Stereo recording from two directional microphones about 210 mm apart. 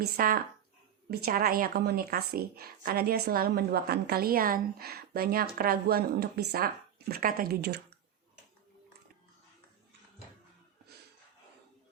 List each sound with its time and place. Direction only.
0.0 s speech: 45° right (ahead or behind)